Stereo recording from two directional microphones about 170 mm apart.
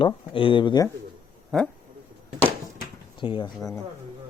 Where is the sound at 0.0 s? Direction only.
30° left (ahead or behind).